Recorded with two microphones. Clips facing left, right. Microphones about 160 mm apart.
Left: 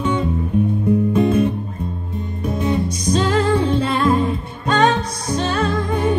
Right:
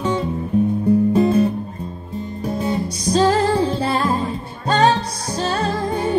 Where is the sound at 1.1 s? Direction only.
35° right (ahead or behind).